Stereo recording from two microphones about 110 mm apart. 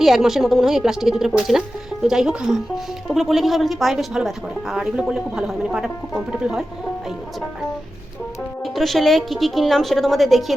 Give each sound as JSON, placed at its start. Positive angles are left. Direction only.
{"t": 0.0, "sound": "a woman's voice", "side_deg": -5}
{"t": 8.6, "sound": "a woman's voice", "side_deg": 0}